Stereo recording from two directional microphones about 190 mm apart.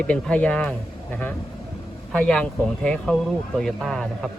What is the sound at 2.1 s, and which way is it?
Speech, 5° left (ahead or behind).